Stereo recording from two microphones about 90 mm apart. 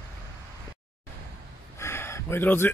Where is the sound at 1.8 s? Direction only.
30° left (ahead or behind).